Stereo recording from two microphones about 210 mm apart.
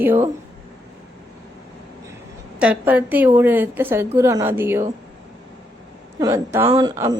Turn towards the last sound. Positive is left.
turn(degrees=-20)  # may be behind; listen again after turning